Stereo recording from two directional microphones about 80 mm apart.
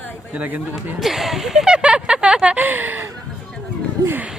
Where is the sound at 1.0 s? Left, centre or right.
Centre; by 3.1 s right.